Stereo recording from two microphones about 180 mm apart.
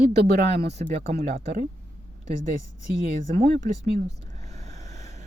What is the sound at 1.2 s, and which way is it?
Speech, 55° right (ahead or behind).